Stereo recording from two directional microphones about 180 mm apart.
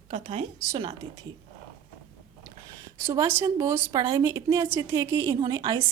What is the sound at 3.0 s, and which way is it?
Speech, 20° right (ahead or behind).